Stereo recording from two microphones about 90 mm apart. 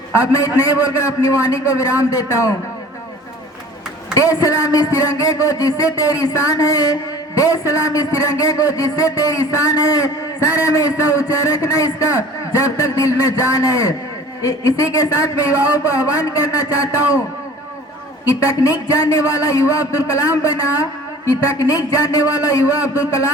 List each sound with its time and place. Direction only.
0.3 s a man's voice: 40° left (ahead or behind)
4.1 s a man's voice: 40° left (ahead or behind)
18.3 s a man's voice: 40° left (ahead or behind)